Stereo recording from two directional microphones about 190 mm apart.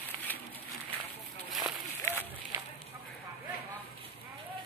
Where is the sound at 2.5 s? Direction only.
15° right (ahead or behind).